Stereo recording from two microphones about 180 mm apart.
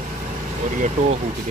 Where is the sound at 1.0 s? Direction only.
45° right (ahead or behind).